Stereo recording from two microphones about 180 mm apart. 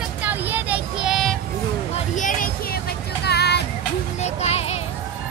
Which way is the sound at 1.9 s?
45° left (ahead or behind).